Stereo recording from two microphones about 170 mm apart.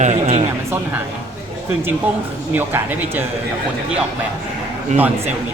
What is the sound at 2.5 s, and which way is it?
Speech, 10° right (ahead or behind).